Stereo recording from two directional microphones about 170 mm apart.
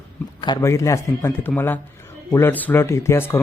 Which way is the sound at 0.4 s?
20° left (ahead or behind).